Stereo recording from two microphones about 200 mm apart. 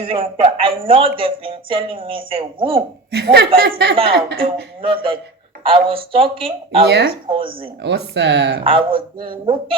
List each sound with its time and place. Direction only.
0.0 s speech: 25° right (ahead or behind)
3.1 s speech: 55° right (ahead or behind)
4.8 s speech: 25° right (ahead or behind)
6.8 s speech: 55° right (ahead or behind)
7.3 s speech: 25° right (ahead or behind)
7.8 s speech: 60° right (ahead or behind)
8.6 s speech: 25° right (ahead or behind)